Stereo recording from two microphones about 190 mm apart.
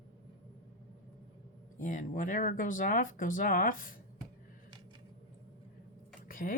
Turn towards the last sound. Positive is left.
turn(degrees=45)  # may be behind; listen again after turning